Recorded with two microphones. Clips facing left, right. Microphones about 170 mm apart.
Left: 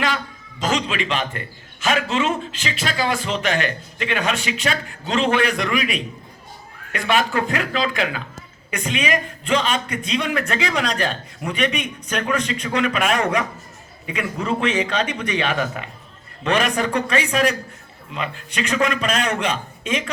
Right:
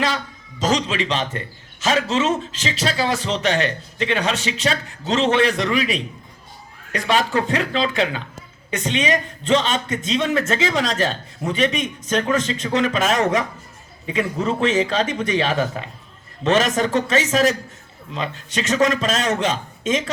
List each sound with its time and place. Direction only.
0.6 s a man's voice: 35° right (ahead or behind)
18.8 s a man's voice: 25° right (ahead or behind)